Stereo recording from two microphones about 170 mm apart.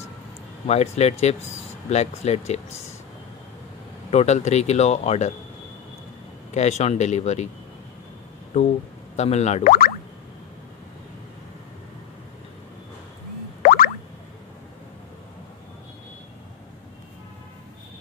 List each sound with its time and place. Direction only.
0.7 s speech: 40° left (ahead or behind)
4.1 s speech: 40° left (ahead or behind)
6.5 s speech: 40° left (ahead or behind)
9.1 s speech: 40° left (ahead or behind)
9.7 s music: 60° left (ahead or behind)
13.6 s music: 60° left (ahead or behind)